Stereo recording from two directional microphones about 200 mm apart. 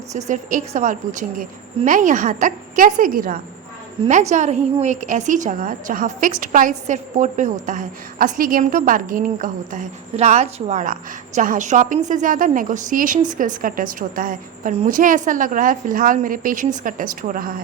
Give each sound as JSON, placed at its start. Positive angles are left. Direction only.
{"t": 0.1, "sound": "a woman's voice", "side_deg": -35}